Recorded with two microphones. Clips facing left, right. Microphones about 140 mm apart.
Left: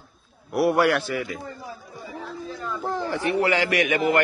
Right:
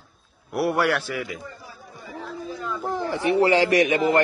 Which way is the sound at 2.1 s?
Centre (ahead or behind).